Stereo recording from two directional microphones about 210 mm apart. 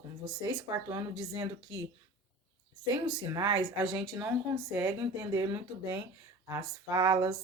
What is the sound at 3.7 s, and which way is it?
Speech, centre (ahead or behind).